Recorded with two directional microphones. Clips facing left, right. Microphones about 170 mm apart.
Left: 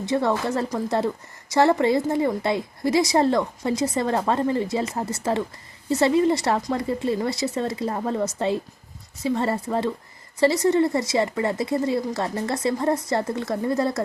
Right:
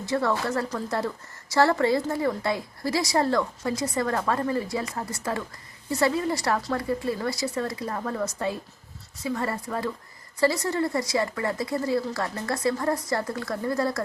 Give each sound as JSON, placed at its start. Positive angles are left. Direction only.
{"t": 0.0, "sound": "speech", "side_deg": 20}